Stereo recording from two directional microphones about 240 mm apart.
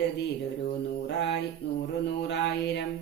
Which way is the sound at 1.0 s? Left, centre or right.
Left.